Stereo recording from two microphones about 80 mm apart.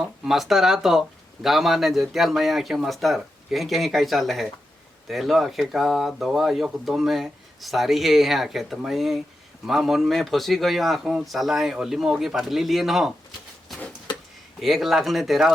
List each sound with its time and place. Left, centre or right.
0.0 s speech: centre
14.6 s speech: centre